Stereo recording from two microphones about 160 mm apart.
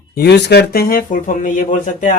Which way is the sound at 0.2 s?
90° left.